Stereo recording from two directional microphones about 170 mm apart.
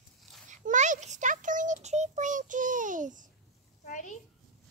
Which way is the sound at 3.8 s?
50° left (ahead or behind).